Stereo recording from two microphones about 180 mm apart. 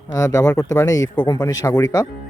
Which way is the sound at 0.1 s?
15° left (ahead or behind).